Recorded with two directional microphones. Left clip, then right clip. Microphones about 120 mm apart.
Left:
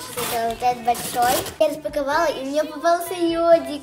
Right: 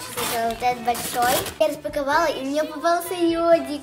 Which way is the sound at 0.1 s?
25° right (ahead or behind).